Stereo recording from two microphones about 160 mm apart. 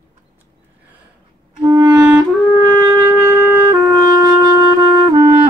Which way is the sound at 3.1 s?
10° right (ahead or behind).